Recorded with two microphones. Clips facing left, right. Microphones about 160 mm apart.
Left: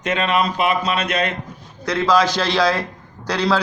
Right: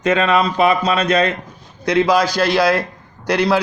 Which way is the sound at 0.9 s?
30° right (ahead or behind).